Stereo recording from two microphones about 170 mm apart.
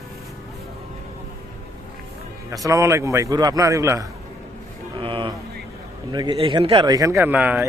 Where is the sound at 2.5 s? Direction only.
20° right (ahead or behind).